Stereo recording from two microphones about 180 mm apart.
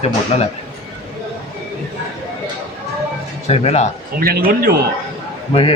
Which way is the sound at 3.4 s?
35° left (ahead or behind).